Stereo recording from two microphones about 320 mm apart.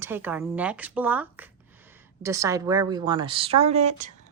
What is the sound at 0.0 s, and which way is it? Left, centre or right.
A woman's voice, centre.